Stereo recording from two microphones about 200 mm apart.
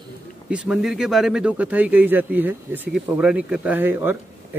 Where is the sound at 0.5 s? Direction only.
5° right (ahead or behind).